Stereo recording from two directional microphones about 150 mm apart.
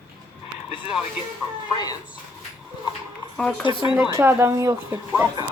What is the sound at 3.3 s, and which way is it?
Speech, 5° left (ahead or behind).